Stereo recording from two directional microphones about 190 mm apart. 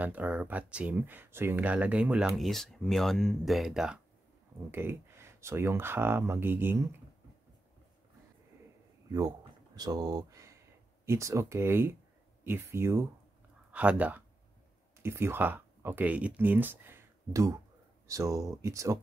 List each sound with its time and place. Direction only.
0.0 s speech: 10° right (ahead or behind)
9.1 s speech: 20° right (ahead or behind)